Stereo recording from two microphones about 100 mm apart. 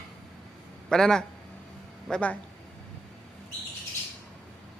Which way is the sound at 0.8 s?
5° left (ahead or behind).